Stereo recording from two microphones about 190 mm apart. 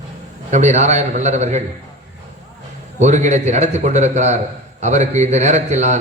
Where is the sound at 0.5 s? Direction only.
40° right (ahead or behind).